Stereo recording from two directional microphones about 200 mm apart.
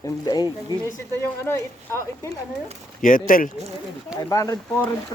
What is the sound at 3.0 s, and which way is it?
Speech, 45° left (ahead or behind).